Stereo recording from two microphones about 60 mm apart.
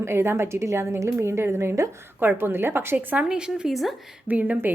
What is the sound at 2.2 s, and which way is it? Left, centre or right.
A woman's voice, right.